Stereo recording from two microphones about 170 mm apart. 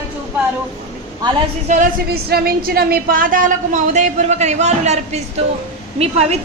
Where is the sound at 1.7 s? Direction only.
55° right (ahead or behind); by 6.4 s 40° right (ahead or behind).